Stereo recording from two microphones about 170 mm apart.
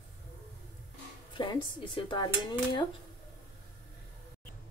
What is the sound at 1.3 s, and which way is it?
Dishes, 30° left (ahead or behind).